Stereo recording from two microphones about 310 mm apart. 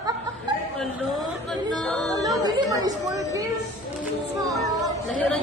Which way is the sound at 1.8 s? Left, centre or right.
Centre.